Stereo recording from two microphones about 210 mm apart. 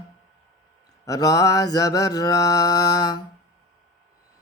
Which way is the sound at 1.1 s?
15° left (ahead or behind).